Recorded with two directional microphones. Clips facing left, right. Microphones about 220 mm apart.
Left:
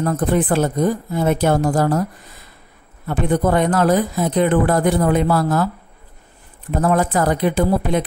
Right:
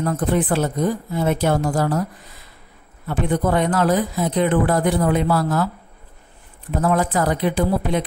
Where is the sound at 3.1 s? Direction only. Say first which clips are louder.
Left 2 dB; 45° left (ahead or behind).